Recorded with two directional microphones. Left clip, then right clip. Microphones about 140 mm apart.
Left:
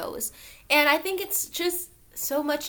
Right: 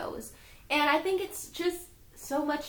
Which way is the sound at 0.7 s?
15° left (ahead or behind).